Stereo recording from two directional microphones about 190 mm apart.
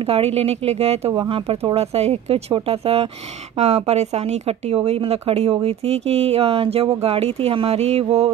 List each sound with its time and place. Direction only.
0.0 s speech: 30° right (ahead or behind)